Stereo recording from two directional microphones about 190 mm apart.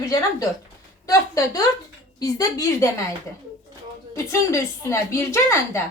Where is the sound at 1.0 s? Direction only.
15° left (ahead or behind).